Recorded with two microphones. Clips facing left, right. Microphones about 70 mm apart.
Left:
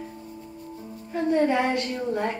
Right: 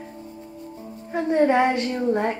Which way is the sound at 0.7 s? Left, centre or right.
Right.